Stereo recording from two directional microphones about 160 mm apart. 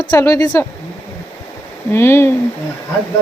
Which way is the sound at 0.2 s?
20° left (ahead or behind).